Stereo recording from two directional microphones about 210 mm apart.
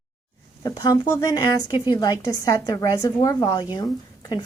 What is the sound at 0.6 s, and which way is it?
A woman's voice, 15° left (ahead or behind).